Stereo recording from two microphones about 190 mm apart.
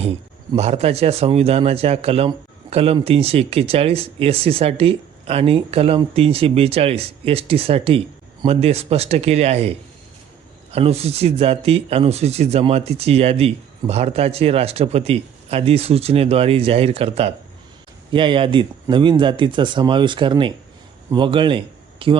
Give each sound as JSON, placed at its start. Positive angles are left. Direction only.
{"t": 0.5, "sound": "a man's voice", "side_deg": -35}